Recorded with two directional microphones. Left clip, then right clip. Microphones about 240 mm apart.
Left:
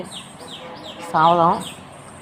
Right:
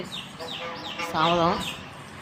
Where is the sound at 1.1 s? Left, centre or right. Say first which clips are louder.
Left 8 dB; centre.